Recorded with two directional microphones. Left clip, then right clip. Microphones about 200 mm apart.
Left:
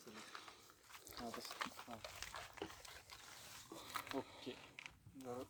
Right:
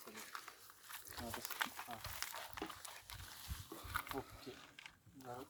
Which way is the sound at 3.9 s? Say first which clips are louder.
Right 3 dB; 25° right (ahead or behind).